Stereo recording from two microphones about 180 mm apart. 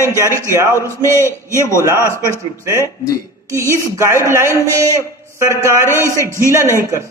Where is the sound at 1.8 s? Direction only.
15° right (ahead or behind).